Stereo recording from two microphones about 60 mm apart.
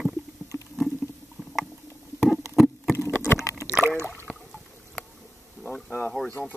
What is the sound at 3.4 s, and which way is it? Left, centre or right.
Liquid, left.